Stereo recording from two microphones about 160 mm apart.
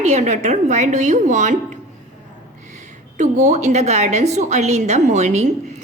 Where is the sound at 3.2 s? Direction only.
45° right (ahead or behind).